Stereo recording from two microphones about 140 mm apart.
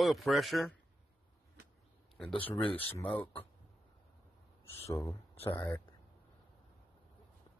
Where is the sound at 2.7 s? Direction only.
15° left (ahead or behind).